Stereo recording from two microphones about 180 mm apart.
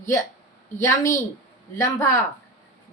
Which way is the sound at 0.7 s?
15° left (ahead or behind).